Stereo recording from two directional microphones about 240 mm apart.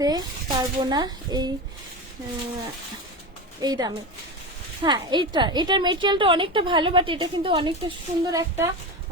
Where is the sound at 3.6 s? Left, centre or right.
Centre.